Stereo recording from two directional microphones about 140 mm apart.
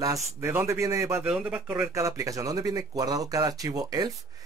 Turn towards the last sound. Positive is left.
turn(degrees=-25)  # may be behind; listen again after turning